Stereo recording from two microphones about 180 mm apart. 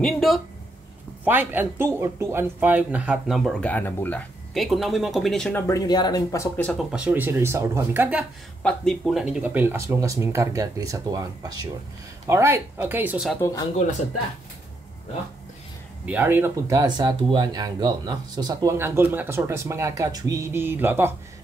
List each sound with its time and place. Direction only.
0.0 s speech: centre (ahead or behind)
1.2 s speech: 10° right (ahead or behind)
5.7 s speech: 20° left (ahead or behind)
6.9 s speech: 5° right (ahead or behind)
8.6 s speech: 5° left (ahead or behind)
16.1 s speech: 10° right (ahead or behind)